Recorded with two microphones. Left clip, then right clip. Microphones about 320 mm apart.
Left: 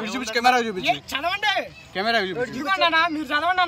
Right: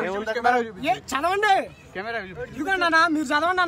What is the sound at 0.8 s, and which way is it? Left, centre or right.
Speech, centre.